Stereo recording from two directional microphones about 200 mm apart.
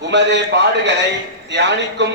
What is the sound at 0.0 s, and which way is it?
A man's voice, 60° right (ahead or behind).